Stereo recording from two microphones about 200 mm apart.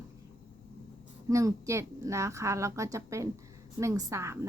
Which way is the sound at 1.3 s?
15° right (ahead or behind).